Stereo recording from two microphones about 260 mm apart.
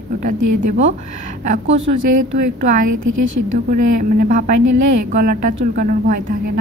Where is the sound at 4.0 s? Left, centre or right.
Right.